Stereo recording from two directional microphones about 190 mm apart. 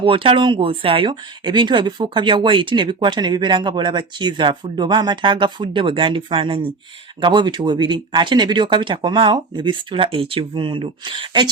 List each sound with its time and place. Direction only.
0.0 s speech: 30° right (ahead or behind)